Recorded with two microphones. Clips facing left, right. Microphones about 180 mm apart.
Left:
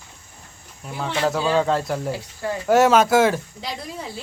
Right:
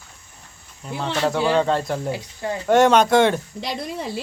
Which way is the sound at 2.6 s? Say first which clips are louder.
Even; 5° left (ahead or behind).